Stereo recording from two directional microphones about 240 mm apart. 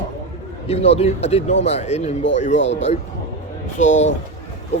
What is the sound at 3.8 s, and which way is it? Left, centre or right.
Speech, left.